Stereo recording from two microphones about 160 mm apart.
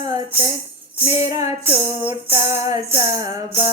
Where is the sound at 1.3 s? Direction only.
20° right (ahead or behind).